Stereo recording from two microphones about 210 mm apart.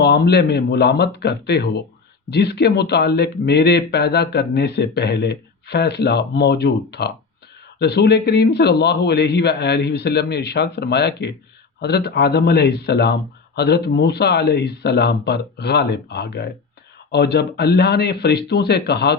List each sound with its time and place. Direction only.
0.0 s speech: 50° left (ahead or behind)